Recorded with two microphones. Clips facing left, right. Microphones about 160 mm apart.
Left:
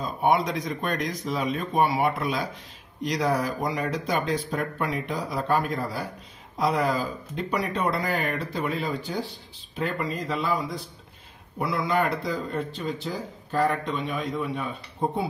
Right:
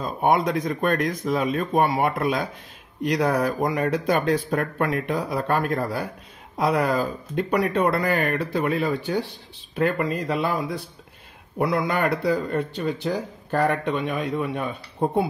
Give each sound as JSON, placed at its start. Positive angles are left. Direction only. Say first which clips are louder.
{"t": 0.0, "sound": "speech", "louder": "right 2 dB", "side_deg": -50}